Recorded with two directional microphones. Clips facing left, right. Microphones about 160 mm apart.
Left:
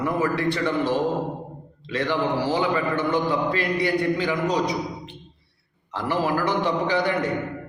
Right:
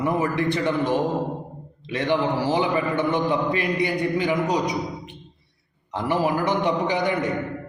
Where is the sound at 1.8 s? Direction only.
20° right (ahead or behind).